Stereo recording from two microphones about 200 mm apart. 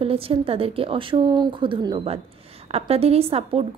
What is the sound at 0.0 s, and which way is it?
A woman's voice, 30° right (ahead or behind).